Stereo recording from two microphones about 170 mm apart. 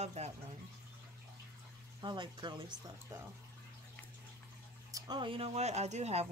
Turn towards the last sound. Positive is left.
turn(degrees=-40)  # may be behind; listen again after turning